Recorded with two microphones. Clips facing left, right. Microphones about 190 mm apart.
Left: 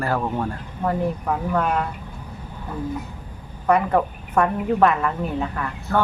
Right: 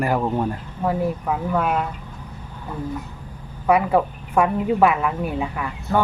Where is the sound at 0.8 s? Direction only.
5° right (ahead or behind).